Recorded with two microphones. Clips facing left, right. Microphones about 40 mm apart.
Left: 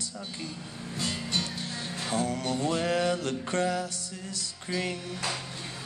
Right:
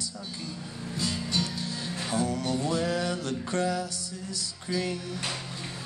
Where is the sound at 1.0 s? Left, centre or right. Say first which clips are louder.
Right 1 dB; left.